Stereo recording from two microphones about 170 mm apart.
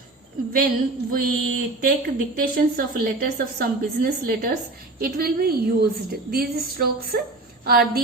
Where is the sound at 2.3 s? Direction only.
60° right (ahead or behind).